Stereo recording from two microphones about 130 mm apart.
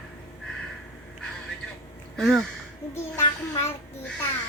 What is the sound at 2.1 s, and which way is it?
Speech, 5° left (ahead or behind).